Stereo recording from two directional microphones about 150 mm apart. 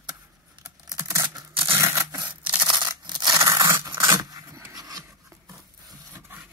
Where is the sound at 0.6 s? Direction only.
20° right (ahead or behind).